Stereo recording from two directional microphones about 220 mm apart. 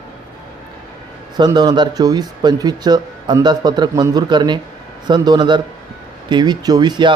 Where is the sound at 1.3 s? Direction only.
20° right (ahead or behind).